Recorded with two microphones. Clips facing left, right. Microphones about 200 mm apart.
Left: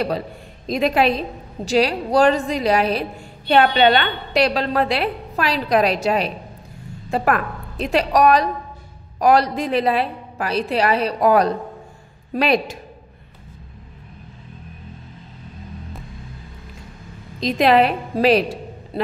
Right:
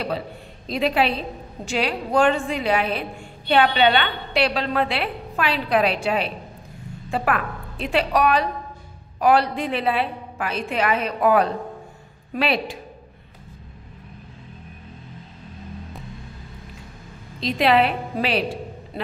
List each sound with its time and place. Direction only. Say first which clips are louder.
0.7 s a woman's voice: left 3 dB; 45° left (ahead or behind)
17.4 s a woman's voice: left 3 dB; 40° left (ahead or behind)